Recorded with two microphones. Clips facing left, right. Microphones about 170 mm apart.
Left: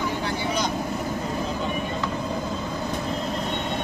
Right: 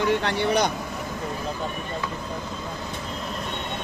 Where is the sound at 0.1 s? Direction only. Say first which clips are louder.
Right 4 dB; 75° right (ahead or behind).